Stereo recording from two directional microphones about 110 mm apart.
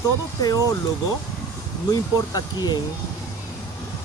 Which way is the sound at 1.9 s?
35° left (ahead or behind).